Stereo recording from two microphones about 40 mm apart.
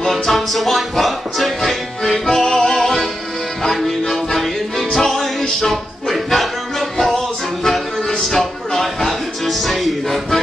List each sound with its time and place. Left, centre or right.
0.0 s music: centre
8.4 s music: centre